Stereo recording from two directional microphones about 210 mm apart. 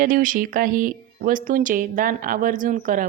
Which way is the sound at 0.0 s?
40° right (ahead or behind).